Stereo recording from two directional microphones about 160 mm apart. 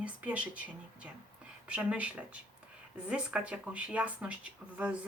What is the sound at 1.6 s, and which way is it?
Speech, 5° right (ahead or behind).